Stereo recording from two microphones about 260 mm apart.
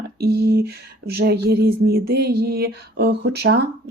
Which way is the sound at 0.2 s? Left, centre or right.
Right.